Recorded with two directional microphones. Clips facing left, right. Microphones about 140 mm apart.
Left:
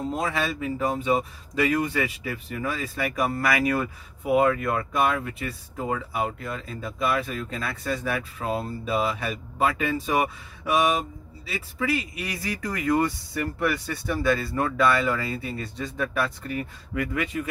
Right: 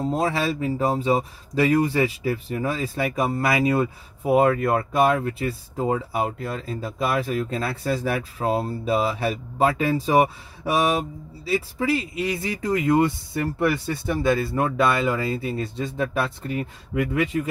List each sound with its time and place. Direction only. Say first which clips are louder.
0.1 s speech: right 5 dB; 35° right (ahead or behind)